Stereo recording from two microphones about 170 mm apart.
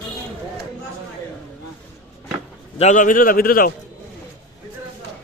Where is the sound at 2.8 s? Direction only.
45° left (ahead or behind).